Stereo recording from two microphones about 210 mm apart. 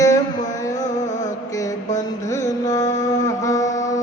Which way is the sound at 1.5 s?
15° left (ahead or behind).